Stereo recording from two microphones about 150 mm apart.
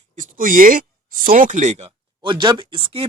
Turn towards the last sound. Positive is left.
turn(degrees=-35)  # may be behind; listen again after turning